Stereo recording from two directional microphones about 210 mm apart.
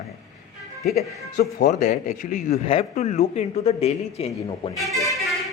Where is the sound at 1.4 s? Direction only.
50° left (ahead or behind).